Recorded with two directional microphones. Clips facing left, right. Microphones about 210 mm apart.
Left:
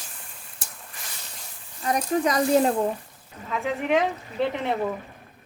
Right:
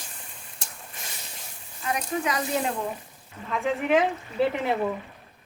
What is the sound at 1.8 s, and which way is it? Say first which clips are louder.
Speech: left 5 dB; 40° left (ahead or behind).